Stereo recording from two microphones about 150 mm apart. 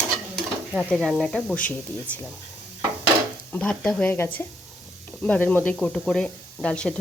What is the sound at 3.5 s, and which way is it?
Speech, 10° left (ahead or behind).